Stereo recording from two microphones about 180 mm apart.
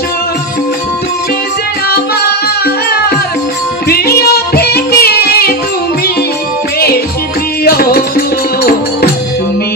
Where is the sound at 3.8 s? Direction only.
60° left (ahead or behind).